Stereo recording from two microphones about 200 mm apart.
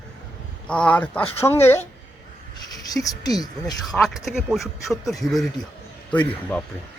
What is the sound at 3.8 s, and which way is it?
Speech, centre (ahead or behind).